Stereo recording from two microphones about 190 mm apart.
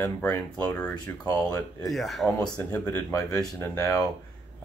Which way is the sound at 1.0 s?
20° left (ahead or behind).